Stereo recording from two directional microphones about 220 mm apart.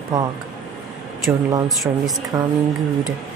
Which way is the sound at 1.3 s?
10° right (ahead or behind).